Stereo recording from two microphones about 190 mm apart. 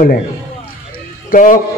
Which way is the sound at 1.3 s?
45° left (ahead or behind).